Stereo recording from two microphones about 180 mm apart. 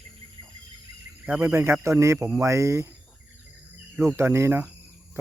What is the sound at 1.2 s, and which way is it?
Speech, 10° right (ahead or behind).